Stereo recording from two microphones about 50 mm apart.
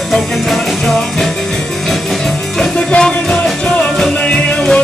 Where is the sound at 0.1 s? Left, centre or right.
Centre.